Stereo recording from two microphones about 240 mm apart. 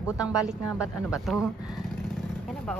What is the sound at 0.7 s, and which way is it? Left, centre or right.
Speech, centre.